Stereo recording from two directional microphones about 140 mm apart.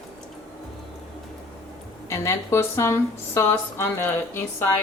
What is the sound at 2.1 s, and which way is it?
Speech, 20° left (ahead or behind).